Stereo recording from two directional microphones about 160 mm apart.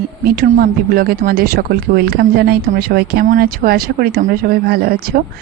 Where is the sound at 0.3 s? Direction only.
70° right (ahead or behind).